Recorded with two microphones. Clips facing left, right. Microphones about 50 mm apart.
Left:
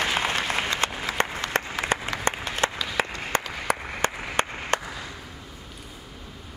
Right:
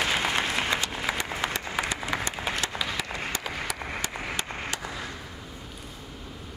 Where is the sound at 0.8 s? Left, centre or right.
Left.